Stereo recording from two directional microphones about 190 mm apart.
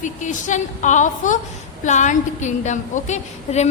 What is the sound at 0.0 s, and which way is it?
A woman's voice, 40° left (ahead or behind).